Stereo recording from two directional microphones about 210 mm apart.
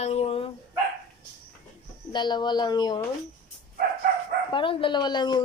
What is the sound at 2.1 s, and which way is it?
Speech, 20° left (ahead or behind).